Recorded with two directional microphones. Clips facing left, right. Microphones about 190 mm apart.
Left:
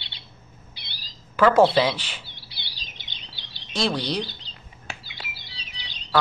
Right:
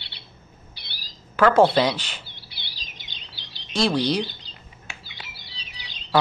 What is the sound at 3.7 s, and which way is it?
Speech, centre (ahead or behind).